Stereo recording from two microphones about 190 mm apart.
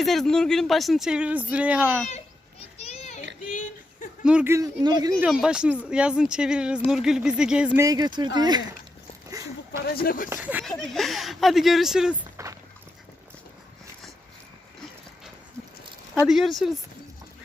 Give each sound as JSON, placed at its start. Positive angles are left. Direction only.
{"t": 0.0, "sound": "speech", "side_deg": 0}
{"t": 2.7, "sound": "children playing", "side_deg": 35}
{"t": 3.5, "sound": "a sound", "side_deg": 45}
{"t": 4.2, "sound": "speech", "side_deg": -5}
{"t": 5.2, "sound": "speech", "side_deg": -5}
{"t": 7.9, "sound": "speech", "side_deg": -20}
{"t": 9.3, "sound": "a sound", "side_deg": -20}
{"t": 9.9, "sound": "speech", "side_deg": 50}
{"t": 10.2, "sound": "speech", "side_deg": -10}
{"t": 16.2, "sound": "speech", "side_deg": 0}